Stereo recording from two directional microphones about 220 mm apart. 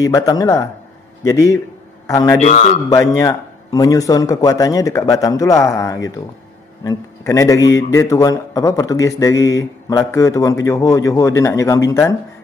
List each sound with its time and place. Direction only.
0.0 s a man's voice: 15° left (ahead or behind)
2.4 s a man's voice: 30° left (ahead or behind)
2.9 s a man's voice: 15° left (ahead or behind)